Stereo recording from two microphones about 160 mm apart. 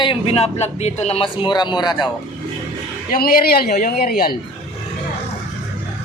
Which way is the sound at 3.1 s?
65° left (ahead or behind).